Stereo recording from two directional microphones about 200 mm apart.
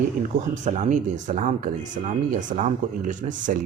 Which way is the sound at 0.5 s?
40° right (ahead or behind).